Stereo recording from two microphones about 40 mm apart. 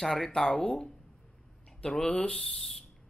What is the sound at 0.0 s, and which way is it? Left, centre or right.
Speech, centre.